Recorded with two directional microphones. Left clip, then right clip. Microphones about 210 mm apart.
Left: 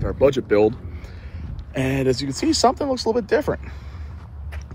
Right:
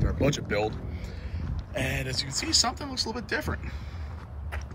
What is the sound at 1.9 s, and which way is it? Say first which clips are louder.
Speech: left 9 dB; 10° left (ahead or behind).